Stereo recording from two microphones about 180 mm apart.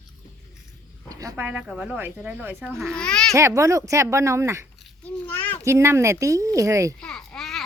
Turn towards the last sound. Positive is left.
turn(degrees=0)  # may be behind; listen again after turning